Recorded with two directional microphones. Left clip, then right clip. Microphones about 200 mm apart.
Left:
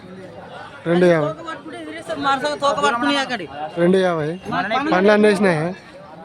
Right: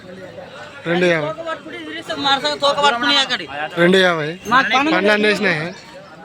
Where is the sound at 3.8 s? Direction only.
5° left (ahead or behind).